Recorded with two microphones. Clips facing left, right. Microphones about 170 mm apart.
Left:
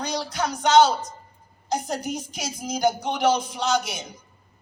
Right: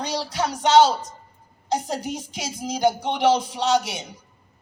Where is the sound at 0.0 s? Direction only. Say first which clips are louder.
Right 1 dB; 30° right (ahead or behind).